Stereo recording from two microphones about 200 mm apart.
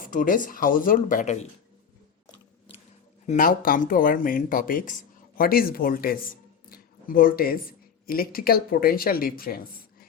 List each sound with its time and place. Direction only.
0.0 s speech: 40° left (ahead or behind)
3.2 s speech: 40° left (ahead or behind)
6.7 s a sound: 45° left (ahead or behind)
8.0 s speech: 45° left (ahead or behind)